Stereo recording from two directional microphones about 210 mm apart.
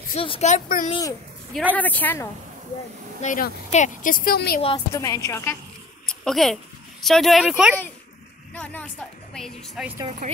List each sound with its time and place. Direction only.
0.1 s a woman's voice: 30° left (ahead or behind)
1.5 s speech: 5° right (ahead or behind)
1.8 s a woman's voice: 10° left (ahead or behind)
3.2 s a woman's voice: 40° left (ahead or behind)
4.6 s a woman's voice: 25° left (ahead or behind)
6.0 s a woman's voice: centre (ahead or behind)
10.2 s speech: 40° right (ahead or behind)